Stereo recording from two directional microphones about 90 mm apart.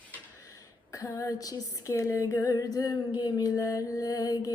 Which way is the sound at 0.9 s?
35° left (ahead or behind).